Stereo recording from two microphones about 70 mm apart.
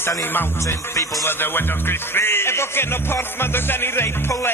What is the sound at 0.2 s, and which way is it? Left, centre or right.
Music, left.